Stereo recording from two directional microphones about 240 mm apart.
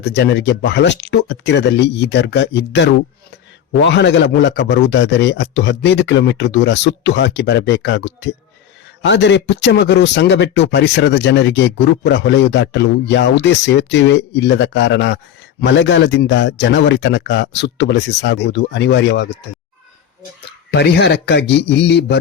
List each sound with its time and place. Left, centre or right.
0.0 s speech: left
20.7 s speech: left